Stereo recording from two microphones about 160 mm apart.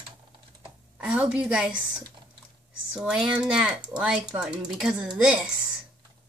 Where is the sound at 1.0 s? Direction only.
5° right (ahead or behind).